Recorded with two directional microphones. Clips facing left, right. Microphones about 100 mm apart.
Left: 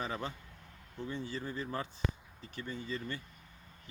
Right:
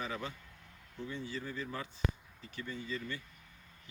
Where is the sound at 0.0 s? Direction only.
35° left (ahead or behind).